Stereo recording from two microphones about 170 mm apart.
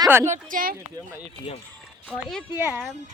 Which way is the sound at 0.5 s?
55° right (ahead or behind).